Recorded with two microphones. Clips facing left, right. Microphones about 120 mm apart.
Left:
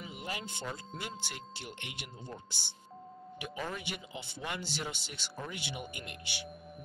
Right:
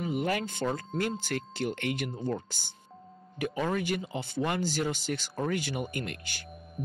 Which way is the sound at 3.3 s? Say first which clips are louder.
Right 10 dB; 60° right (ahead or behind).